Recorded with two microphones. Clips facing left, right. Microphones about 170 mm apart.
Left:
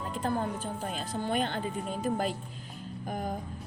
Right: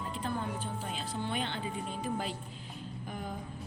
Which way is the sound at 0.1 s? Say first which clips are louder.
Left 6 dB; 45° left (ahead or behind).